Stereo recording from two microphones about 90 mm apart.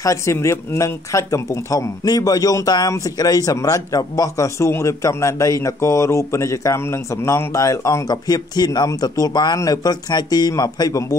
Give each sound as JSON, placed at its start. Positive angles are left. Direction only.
{"t": 0.0, "sound": "speech", "side_deg": 35}
{"t": 8.1, "sound": "speech", "side_deg": 50}